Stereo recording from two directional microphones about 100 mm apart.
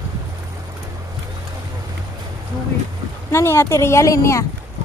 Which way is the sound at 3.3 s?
25° left (ahead or behind).